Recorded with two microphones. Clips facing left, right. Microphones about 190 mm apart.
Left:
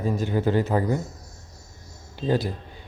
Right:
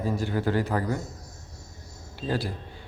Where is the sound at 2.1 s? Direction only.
20° left (ahead or behind).